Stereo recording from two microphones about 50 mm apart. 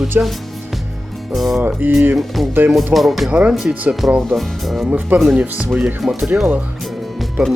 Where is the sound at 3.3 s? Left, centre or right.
Right.